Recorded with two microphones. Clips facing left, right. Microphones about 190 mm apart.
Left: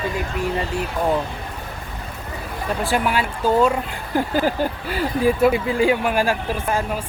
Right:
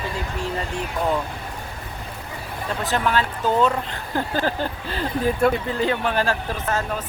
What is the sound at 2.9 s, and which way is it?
Speech, 10° left (ahead or behind).